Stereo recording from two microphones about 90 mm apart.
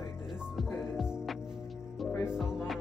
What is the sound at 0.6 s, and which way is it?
Music, 5° right (ahead or behind).